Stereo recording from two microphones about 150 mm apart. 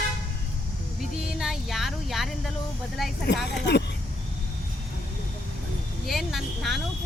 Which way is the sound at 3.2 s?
90° left.